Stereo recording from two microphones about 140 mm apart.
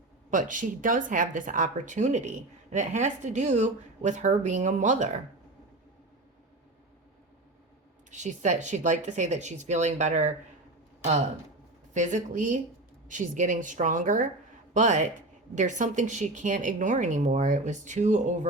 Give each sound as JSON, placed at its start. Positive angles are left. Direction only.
{"t": 0.3, "sound": "a woman's voice", "side_deg": -65}
{"t": 8.1, "sound": "a woman's voice", "side_deg": -60}
{"t": 11.9, "sound": "a woman's voice", "side_deg": -60}